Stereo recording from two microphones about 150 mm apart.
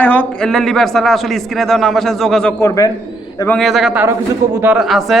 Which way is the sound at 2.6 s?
25° left (ahead or behind).